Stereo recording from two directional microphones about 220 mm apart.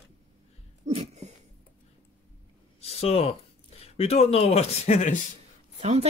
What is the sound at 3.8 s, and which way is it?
Speech, 25° left (ahead or behind).